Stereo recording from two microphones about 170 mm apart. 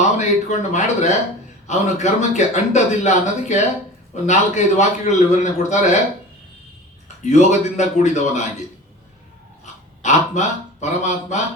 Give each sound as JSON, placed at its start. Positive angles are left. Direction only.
{"t": 0.0, "sound": "a man's voice", "side_deg": 45}
{"t": 7.3, "sound": "a man's voice", "side_deg": 45}
{"t": 10.0, "sound": "a man's voice", "side_deg": 45}